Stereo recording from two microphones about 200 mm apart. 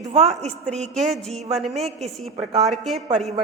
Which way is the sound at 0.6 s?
5° left (ahead or behind).